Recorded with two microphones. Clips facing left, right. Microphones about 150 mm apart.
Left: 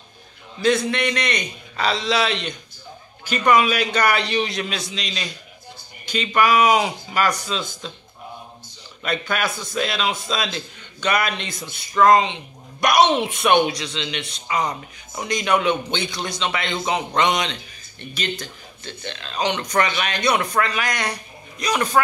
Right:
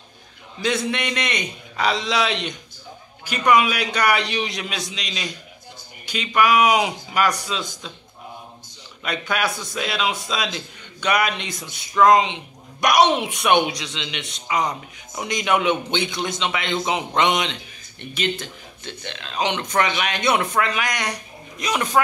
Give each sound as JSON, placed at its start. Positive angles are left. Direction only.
{"t": 0.6, "sound": "a man's voice", "side_deg": -20}
{"t": 9.0, "sound": "a man's voice", "side_deg": -15}